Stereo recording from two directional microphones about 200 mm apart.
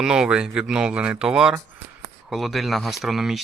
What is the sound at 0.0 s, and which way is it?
Speech, 5° right (ahead or behind).